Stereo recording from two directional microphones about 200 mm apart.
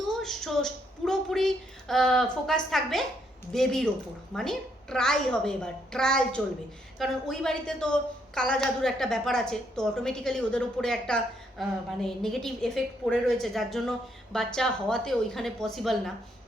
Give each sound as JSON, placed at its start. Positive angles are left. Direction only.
{"t": 0.0, "sound": "a woman's voice", "side_deg": 0}